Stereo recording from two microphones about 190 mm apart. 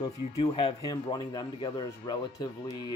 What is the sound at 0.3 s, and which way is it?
Speech, 30° left (ahead or behind).